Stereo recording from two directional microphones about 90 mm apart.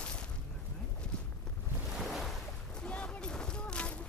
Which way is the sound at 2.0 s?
Centre (ahead or behind).